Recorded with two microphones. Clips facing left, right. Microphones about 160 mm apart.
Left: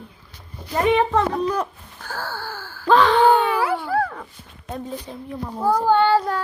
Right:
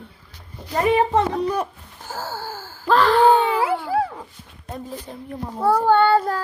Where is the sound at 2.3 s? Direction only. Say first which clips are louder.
Right 1 dB; 45° right (ahead or behind).